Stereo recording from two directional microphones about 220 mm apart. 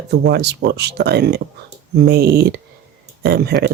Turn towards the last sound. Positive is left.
turn(degrees=-45)  # may be behind; listen again after turning